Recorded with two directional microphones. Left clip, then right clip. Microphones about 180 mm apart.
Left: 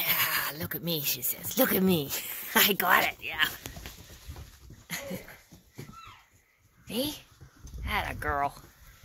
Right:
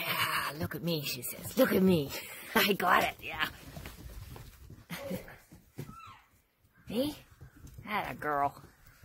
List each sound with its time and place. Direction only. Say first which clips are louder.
0.0 s speech: left 2 dB; 5° right (ahead or behind)
4.8 s a sound: left 3 dB; centre (ahead or behind)
6.9 s speech: left 1 dB; 5° right (ahead or behind)